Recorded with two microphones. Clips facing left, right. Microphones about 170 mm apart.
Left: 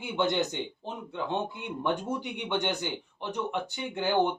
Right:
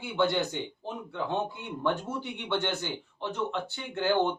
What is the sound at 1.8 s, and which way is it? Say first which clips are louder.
Speech: even; 15° left (ahead or behind).